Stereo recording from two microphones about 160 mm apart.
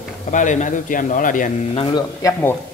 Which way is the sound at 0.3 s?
50° left (ahead or behind).